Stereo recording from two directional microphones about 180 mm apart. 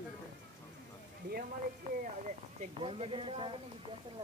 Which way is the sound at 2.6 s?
30° right (ahead or behind).